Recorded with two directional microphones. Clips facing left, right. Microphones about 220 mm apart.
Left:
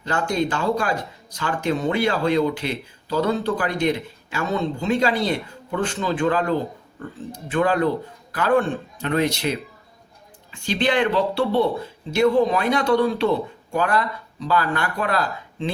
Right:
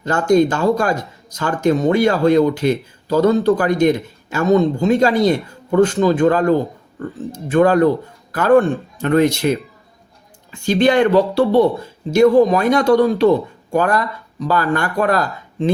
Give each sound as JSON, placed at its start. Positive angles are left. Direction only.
{"t": 0.0, "sound": "speech", "side_deg": -45}